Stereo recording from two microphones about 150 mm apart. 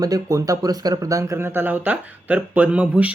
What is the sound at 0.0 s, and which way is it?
Speech, 25° right (ahead or behind).